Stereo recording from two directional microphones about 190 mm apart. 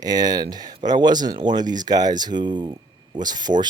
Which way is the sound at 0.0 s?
20° right (ahead or behind).